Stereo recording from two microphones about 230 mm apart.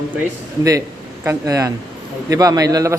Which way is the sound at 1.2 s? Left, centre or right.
Centre.